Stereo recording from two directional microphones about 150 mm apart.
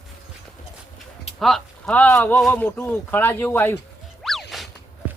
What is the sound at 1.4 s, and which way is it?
Speech, 5° left (ahead or behind).